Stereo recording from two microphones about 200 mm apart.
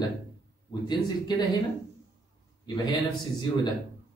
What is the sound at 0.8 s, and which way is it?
Speech, 20° left (ahead or behind).